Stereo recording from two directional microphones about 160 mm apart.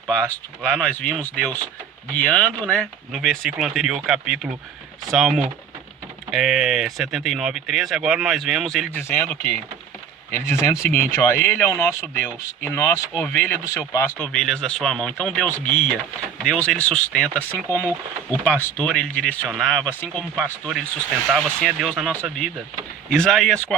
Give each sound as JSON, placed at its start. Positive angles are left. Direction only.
{"t": 0.1, "sound": "speech", "side_deg": 5}
{"t": 3.2, "sound": "speech", "side_deg": -5}
{"t": 8.9, "sound": "speech", "side_deg": 15}
{"t": 14.3, "sound": "speech", "side_deg": 5}